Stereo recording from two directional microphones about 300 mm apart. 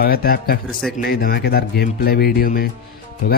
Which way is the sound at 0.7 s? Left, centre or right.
Centre.